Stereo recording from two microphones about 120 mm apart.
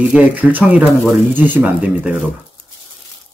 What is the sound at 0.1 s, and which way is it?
Speech, 10° right (ahead or behind).